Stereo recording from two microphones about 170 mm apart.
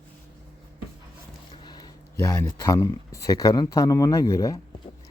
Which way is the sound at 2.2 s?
15° left (ahead or behind).